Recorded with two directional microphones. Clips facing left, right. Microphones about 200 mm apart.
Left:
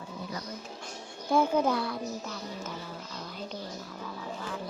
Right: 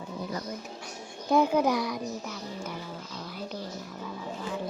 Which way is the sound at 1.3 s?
15° right (ahead or behind).